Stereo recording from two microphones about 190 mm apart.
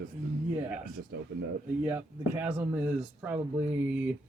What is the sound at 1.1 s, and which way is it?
Speech, 60° right (ahead or behind).